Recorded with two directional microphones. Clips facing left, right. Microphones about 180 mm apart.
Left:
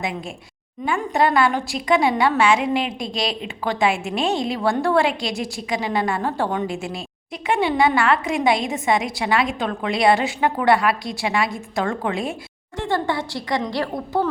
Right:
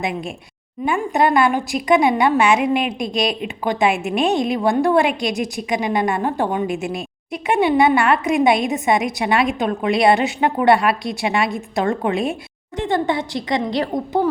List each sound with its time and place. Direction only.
0.9 s a woman's voice: 20° right (ahead or behind)